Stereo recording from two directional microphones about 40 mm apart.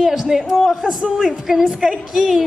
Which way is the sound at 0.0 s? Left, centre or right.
Centre.